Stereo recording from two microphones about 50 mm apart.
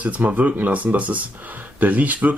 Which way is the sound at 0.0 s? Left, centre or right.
Right.